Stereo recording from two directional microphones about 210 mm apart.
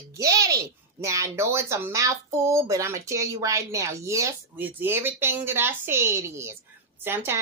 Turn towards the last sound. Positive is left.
turn(degrees=-10)  # may be behind; listen again after turning